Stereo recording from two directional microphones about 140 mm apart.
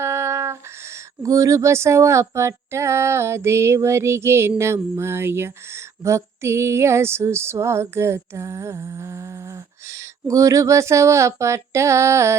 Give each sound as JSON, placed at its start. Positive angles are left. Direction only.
{"t": 0.0, "sound": "a sound", "side_deg": -20}
{"t": 1.2, "sound": "speech", "side_deg": -25}
{"t": 10.2, "sound": "speech", "side_deg": -25}